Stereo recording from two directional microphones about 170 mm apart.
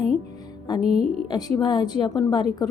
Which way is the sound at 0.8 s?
40° right (ahead or behind).